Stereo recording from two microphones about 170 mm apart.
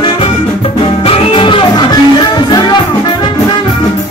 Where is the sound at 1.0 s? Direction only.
35° left (ahead or behind).